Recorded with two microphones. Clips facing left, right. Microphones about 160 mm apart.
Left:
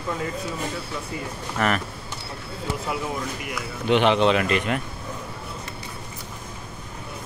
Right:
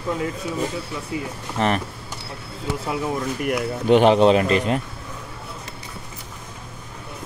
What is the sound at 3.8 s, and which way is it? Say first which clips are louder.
Speech: right 4 dB; 40° right (ahead or behind).